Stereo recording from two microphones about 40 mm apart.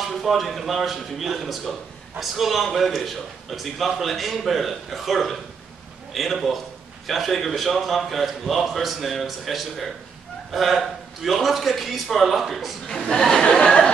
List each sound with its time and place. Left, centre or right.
0.0 s speech: centre
13.1 s speech: centre
13.4 s a sound: left